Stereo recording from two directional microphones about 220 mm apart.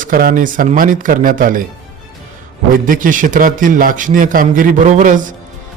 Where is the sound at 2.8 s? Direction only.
35° right (ahead or behind).